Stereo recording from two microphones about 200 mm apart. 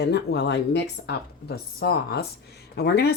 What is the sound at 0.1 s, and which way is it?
A woman's voice, 55° left (ahead or behind).